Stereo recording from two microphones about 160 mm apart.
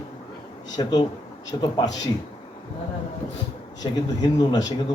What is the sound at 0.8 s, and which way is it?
Speech, 25° left (ahead or behind).